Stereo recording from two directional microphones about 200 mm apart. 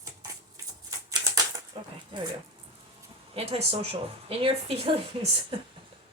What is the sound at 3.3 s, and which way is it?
Speech, 30° right (ahead or behind).